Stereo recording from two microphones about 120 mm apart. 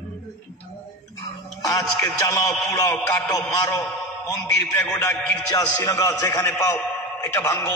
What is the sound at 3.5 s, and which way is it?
Speech, 25° left (ahead or behind).